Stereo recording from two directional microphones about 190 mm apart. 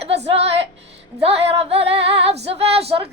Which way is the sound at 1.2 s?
30° right (ahead or behind).